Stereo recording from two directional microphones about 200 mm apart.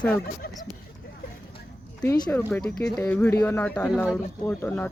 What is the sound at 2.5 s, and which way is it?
Speech, 5° left (ahead or behind).